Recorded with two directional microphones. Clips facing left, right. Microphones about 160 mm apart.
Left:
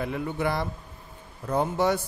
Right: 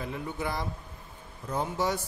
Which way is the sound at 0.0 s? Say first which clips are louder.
Left 6 dB; 65° left (ahead or behind).